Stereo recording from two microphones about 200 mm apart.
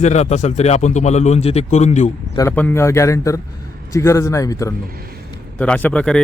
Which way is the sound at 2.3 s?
10° left (ahead or behind).